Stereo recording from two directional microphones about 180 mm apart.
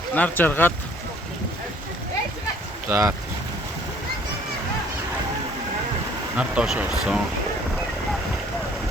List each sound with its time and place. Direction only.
0.1 s speech: 10° left (ahead or behind)
2.9 s speech: 15° right (ahead or behind)
6.3 s speech: 5° right (ahead or behind)